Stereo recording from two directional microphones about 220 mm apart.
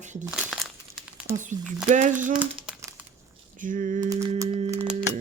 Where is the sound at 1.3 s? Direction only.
35° right (ahead or behind).